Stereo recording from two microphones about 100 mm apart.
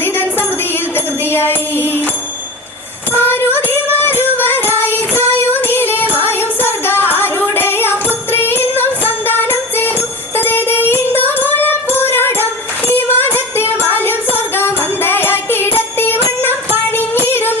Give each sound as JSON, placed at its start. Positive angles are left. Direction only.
{"t": 0.0, "sound": "a sound", "side_deg": 20}
{"t": 0.9, "sound": "music", "side_deg": 20}
{"t": 3.1, "sound": "music", "side_deg": 20}